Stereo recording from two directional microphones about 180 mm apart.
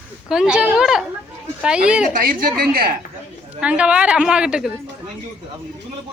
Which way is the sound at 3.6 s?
5° right (ahead or behind).